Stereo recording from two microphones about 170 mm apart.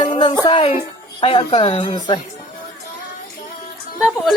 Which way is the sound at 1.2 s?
35° left (ahead or behind).